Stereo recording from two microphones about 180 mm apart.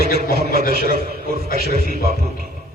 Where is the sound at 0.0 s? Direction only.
60° right (ahead or behind).